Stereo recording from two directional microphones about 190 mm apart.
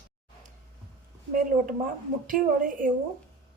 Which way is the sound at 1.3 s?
45° right (ahead or behind).